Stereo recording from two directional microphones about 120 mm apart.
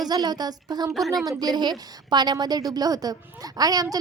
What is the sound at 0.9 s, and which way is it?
Speech, centre (ahead or behind).